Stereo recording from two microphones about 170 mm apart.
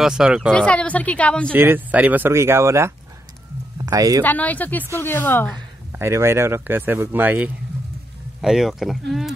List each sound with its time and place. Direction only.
0.0 s speech: 5° right (ahead or behind)
1.5 s speech: 10° right (ahead or behind)
3.7 s a sound: 20° right (ahead or behind)
4.2 s a woman's voice: 10° left (ahead or behind)
5.9 s speech: 15° right (ahead or behind)